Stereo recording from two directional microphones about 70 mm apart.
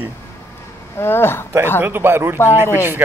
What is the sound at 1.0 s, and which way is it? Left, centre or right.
Speech, left.